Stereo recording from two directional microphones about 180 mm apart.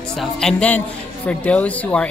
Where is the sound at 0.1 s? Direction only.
5° left (ahead or behind).